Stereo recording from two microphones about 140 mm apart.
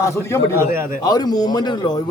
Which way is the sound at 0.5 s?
20° right (ahead or behind).